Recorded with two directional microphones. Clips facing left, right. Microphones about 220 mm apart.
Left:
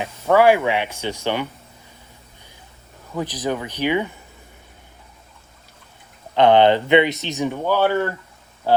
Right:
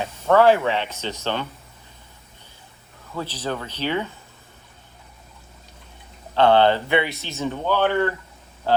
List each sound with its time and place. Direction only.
0.0 s speech: 10° left (ahead or behind)
3.2 s speech: 15° left (ahead or behind)
6.3 s speech: 15° left (ahead or behind)
8.7 s a sound: 10° left (ahead or behind)